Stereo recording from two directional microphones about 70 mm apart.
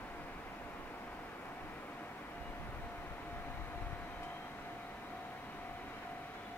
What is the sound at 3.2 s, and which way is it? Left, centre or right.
Vehicle, left.